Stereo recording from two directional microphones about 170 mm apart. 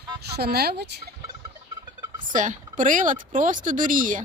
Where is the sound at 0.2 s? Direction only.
70° right (ahead or behind).